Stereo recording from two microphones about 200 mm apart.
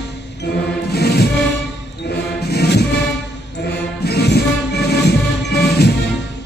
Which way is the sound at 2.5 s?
55° left (ahead or behind).